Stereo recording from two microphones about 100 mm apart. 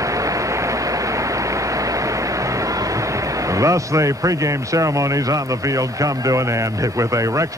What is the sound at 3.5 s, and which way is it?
A man's voice, 30° right (ahead or behind).